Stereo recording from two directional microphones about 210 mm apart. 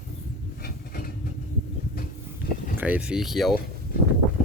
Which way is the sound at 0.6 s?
45° left (ahead or behind).